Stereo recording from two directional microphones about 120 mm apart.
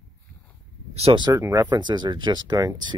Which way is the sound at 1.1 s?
35° right (ahead or behind).